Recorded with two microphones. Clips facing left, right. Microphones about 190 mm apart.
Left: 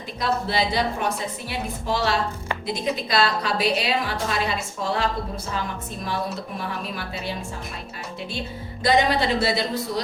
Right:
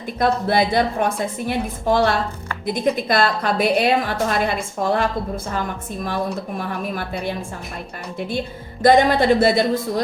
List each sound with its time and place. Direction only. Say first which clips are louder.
0.2 s a woman's voice: right 6 dB; 50° right (ahead or behind)
6.6 s a woman's voice: right 5 dB; 50° right (ahead or behind)
8.8 s a woman's voice: right 6 dB; 50° right (ahead or behind)